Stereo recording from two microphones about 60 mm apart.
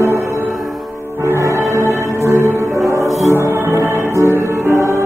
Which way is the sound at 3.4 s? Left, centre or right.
Right.